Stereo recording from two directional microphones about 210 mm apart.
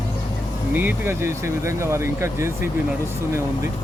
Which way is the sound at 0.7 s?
10° right (ahead or behind).